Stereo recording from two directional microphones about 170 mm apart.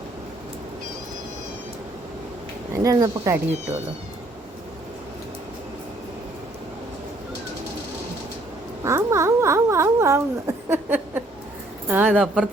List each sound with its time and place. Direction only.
2.7 s speech: 20° right (ahead or behind)
8.8 s speech: 15° right (ahead or behind)